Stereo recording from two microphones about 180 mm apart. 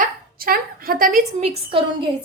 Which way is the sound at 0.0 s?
55° right (ahead or behind).